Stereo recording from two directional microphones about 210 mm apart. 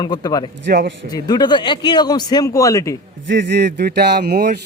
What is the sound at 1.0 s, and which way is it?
Speech, 20° left (ahead or behind).